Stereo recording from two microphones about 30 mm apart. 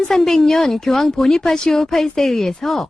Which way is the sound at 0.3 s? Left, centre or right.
Centre.